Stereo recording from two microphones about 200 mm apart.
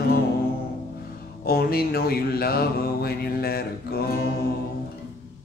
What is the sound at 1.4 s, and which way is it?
Mantra, 50° left (ahead or behind).